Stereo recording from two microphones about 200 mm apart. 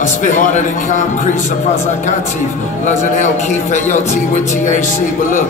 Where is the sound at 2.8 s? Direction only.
35° left (ahead or behind).